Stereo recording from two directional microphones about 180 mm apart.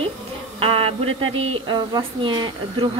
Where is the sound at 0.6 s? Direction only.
30° right (ahead or behind).